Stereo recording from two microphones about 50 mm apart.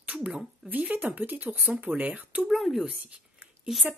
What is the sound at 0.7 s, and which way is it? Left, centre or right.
Speech, right.